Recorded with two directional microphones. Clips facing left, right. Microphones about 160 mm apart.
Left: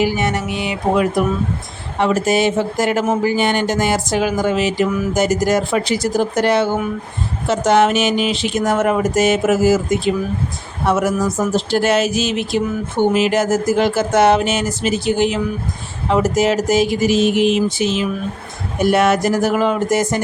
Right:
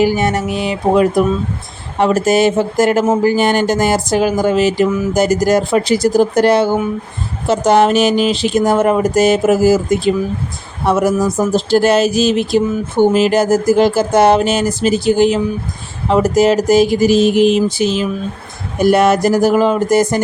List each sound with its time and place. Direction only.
0.0 s speech: 40° right (ahead or behind)